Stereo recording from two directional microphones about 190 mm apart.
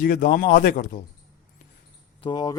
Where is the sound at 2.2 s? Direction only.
25° left (ahead or behind).